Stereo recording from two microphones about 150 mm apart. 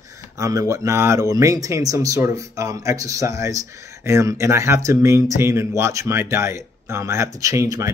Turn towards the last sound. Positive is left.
turn(degrees=-20)  # may be behind; listen again after turning